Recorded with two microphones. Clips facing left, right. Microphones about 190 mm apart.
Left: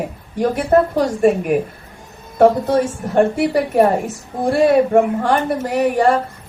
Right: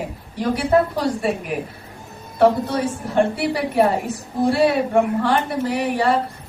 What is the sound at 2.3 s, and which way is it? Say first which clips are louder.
A woman's voice: left 4 dB; 45° left (ahead or behind).